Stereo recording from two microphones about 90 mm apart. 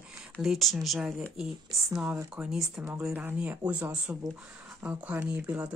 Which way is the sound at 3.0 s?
15° right (ahead or behind).